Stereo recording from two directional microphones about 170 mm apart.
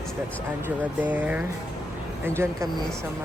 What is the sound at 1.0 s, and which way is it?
Speech, 10° right (ahead or behind).